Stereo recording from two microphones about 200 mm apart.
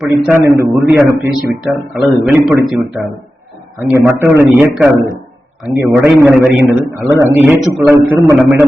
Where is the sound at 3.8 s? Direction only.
10° right (ahead or behind).